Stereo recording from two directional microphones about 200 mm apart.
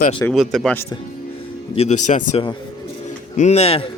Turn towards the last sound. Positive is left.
turn(degrees=30)  # may be behind; listen again after turning